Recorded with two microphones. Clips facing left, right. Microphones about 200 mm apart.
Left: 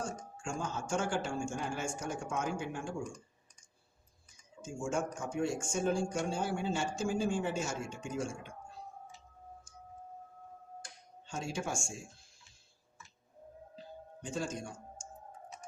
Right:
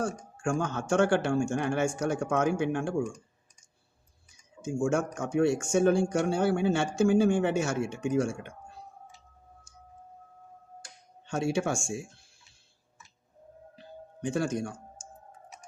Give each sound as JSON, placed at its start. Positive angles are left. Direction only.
{"t": 0.0, "sound": "speech", "side_deg": -70}
{"t": 4.6, "sound": "speech", "side_deg": -75}
{"t": 11.3, "sound": "speech", "side_deg": -70}
{"t": 13.7, "sound": "music", "side_deg": -70}